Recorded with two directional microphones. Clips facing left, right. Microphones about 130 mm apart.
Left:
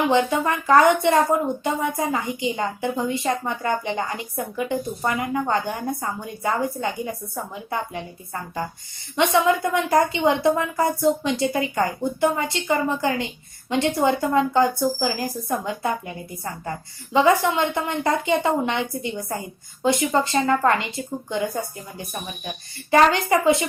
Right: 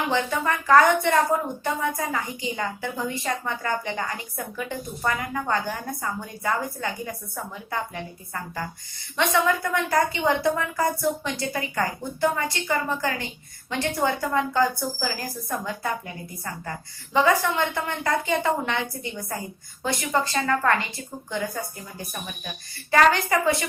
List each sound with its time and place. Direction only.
0.1 s speech: 20° left (ahead or behind)
9.1 s speech: 20° left (ahead or behind)